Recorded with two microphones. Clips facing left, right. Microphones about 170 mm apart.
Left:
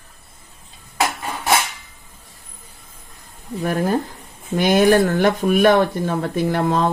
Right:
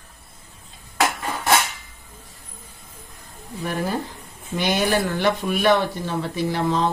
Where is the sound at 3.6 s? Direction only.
50° left (ahead or behind).